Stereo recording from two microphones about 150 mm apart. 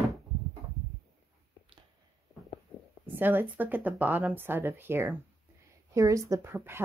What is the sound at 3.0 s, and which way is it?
Speech, 15° right (ahead or behind).